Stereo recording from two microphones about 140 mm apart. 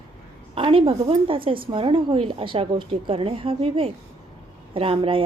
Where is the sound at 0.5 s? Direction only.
40° right (ahead or behind).